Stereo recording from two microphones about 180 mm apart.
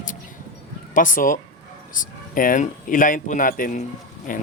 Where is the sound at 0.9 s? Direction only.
45° left (ahead or behind).